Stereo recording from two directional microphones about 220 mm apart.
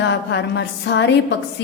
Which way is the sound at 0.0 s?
55° left (ahead or behind).